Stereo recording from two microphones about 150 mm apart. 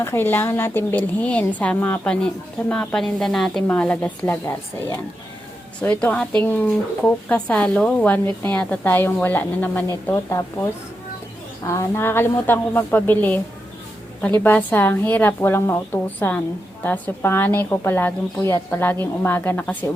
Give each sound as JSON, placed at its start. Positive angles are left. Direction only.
{"t": 0.0, "sound": "a woman's voice", "side_deg": 15}
{"t": 5.8, "sound": "a woman's voice", "side_deg": 10}
{"t": 11.6, "sound": "a woman's voice", "side_deg": 20}
{"t": 14.4, "sound": "a woman's voice", "side_deg": 15}